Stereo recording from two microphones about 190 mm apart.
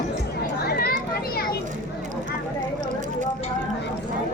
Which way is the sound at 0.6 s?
55° left (ahead or behind).